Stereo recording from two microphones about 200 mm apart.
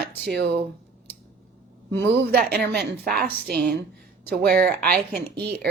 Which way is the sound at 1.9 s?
55° right (ahead or behind).